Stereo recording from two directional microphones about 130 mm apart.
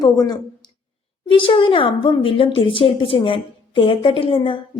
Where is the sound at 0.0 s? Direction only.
30° left (ahead or behind).